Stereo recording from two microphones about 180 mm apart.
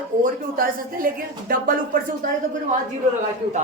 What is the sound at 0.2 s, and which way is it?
A woman's voice, 50° right (ahead or behind).